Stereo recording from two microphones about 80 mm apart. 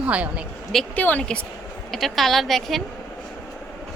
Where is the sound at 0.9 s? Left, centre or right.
Left.